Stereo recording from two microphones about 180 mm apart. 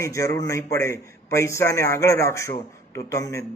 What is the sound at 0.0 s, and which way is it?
A man's voice, 15° left (ahead or behind).